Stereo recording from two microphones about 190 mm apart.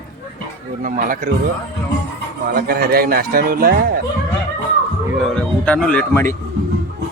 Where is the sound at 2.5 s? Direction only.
50° right (ahead or behind).